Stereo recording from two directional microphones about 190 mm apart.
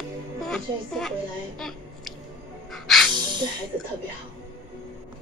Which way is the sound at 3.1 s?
25° right (ahead or behind).